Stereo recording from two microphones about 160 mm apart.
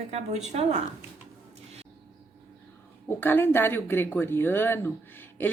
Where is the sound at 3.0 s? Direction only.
15° left (ahead or behind).